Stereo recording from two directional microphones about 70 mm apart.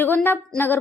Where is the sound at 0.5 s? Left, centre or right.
Left.